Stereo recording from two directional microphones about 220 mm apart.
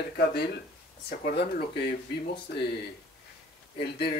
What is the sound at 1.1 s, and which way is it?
Speech, 40° left (ahead or behind).